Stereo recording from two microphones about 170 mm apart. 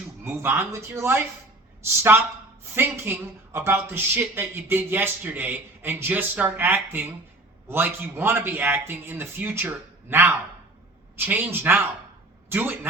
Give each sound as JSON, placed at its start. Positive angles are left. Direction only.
{"t": 0.3, "sound": "speech", "side_deg": -15}